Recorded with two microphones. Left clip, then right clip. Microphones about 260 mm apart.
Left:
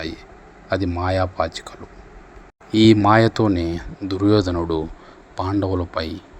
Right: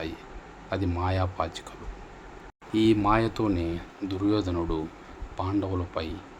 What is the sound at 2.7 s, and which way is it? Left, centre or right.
Speech, left.